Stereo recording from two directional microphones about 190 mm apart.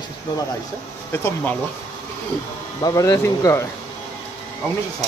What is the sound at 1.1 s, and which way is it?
Speech, 15° left (ahead or behind).